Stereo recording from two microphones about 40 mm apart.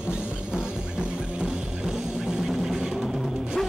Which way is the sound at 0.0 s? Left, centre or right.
Right.